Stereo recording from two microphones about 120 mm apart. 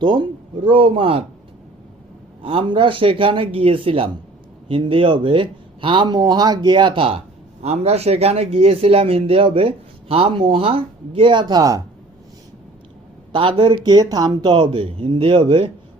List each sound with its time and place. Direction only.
0.0 s speech: 40° right (ahead or behind)
2.4 s speech: 50° right (ahead or behind)
7.6 s speech: 60° right (ahead or behind); by 11.8 s 30° right (ahead or behind)
13.3 s speech: 45° right (ahead or behind)